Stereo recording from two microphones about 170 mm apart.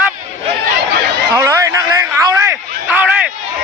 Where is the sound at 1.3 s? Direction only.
20° right (ahead or behind).